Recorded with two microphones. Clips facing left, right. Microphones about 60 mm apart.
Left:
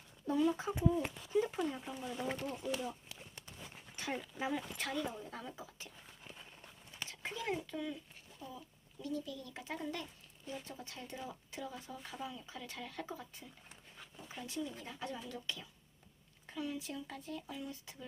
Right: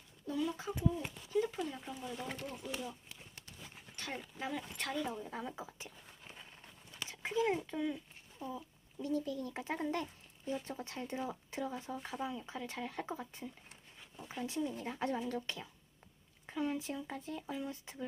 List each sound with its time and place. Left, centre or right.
0.3 s speech: left
1.7 s speech: centre
2.3 s speech: left
4.0 s dog: centre
4.4 s speech: centre
5.2 s a child's voice: centre
14.8 s speech: right